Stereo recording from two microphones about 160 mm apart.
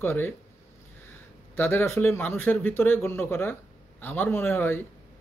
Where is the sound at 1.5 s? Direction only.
15° left (ahead or behind).